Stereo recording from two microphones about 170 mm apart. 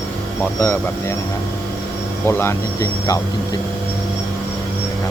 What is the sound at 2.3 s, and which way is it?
Speech, 15° left (ahead or behind).